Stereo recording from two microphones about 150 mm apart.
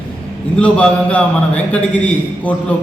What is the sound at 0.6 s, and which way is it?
A man's voice, 10° left (ahead or behind).